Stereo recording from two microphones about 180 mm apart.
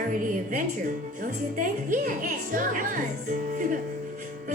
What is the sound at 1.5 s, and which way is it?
Speech, 45° right (ahead or behind).